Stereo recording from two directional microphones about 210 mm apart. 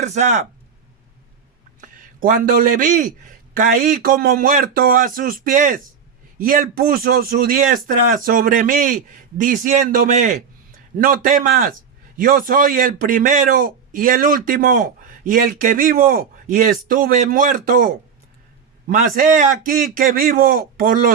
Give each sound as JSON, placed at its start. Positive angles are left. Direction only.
{"t": 0.0, "sound": "a man's voice", "side_deg": -35}
{"t": 1.8, "sound": "a man's voice", "side_deg": -40}